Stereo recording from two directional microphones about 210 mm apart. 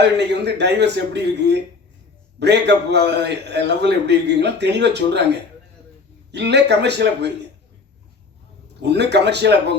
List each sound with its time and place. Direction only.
0.2 s a man's voice: 55° right (ahead or behind)
6.3 s a man's voice: 55° right (ahead or behind)
8.8 s a man's voice: 55° right (ahead or behind)